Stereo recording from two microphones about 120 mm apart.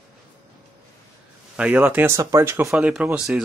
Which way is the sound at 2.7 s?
10° right (ahead or behind).